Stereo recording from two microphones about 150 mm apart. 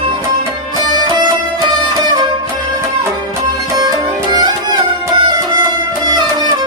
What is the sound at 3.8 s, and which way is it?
Music, 30° right (ahead or behind).